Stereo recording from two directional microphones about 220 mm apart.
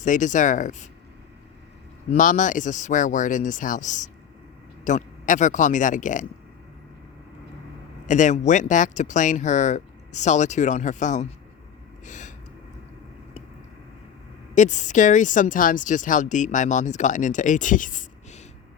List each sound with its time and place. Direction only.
0.0 s speech: 35° left (ahead or behind)
2.1 s speech: 35° left (ahead or behind)
8.0 s speech: 35° left (ahead or behind)
12.0 s gasp: 35° left (ahead or behind)
14.5 s speech: 35° left (ahead or behind)